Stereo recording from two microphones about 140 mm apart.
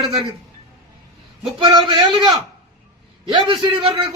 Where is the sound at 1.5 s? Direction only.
30° right (ahead or behind).